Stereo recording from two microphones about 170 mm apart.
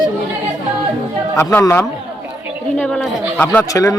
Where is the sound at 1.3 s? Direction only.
15° left (ahead or behind).